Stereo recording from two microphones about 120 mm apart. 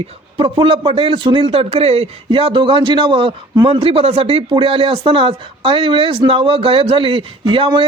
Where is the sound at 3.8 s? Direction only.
55° right (ahead or behind).